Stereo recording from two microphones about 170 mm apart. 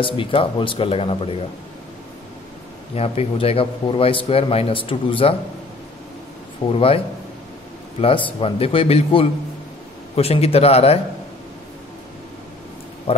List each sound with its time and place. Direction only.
0.0 s a man's voice: 30° left (ahead or behind)
3.0 s a man's voice: 35° left (ahead or behind)
6.7 s a man's voice: 35° left (ahead or behind)
8.0 s a man's voice: 30° left (ahead or behind)